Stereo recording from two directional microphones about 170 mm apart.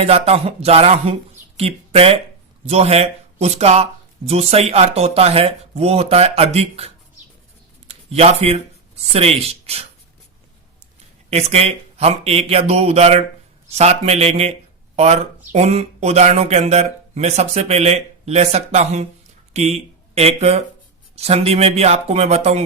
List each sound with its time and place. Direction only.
0.0 s speech: 35° right (ahead or behind)
11.3 s speech: 40° right (ahead or behind)